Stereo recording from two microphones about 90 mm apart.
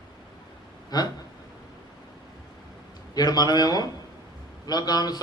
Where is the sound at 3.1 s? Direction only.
45° left (ahead or behind).